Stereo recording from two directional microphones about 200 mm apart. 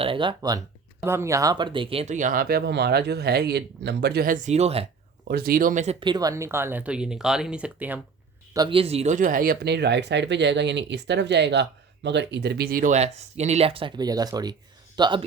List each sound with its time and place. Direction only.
0.0 s speech: 25° right (ahead or behind)
5.3 s speech: 50° right (ahead or behind); by 8.0 s 5° right (ahead or behind)
8.5 s speech: 25° right (ahead or behind)